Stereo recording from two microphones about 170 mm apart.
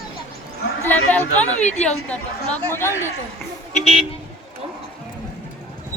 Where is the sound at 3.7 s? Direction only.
35° left (ahead or behind).